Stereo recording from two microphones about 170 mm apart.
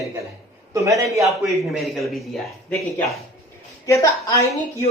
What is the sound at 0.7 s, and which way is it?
Speech, 20° right (ahead or behind).